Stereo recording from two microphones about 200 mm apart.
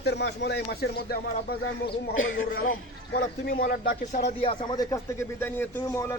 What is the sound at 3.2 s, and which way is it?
A man's voice, 45° left (ahead or behind).